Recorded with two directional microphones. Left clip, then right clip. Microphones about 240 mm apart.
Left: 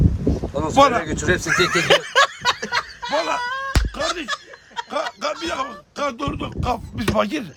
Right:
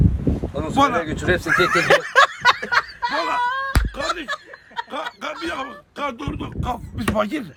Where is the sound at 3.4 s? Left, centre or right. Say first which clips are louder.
Right 3 dB; centre.